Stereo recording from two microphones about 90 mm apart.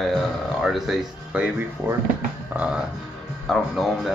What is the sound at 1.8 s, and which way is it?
Speech, 30° right (ahead or behind).